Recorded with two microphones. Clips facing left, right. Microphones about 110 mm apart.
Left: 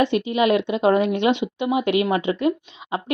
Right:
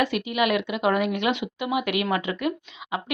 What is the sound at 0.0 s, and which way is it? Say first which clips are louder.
Speech: left 5 dB; 25° left (ahead or behind).